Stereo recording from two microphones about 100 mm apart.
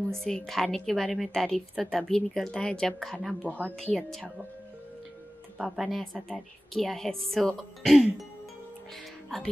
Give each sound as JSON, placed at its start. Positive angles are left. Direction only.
{"t": 0.1, "sound": "a woman's voice", "side_deg": 5}
{"t": 3.4, "sound": "speech", "side_deg": -15}
{"t": 3.7, "sound": "a woman's voice", "side_deg": 5}
{"t": 5.6, "sound": "a woman's voice", "side_deg": 0}